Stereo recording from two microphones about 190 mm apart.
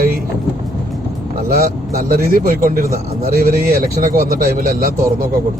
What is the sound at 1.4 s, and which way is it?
A man's voice, 50° right (ahead or behind).